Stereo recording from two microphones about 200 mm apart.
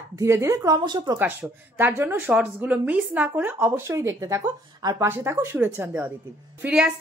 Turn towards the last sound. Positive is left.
turn(degrees=-5)  # may be behind; listen again after turning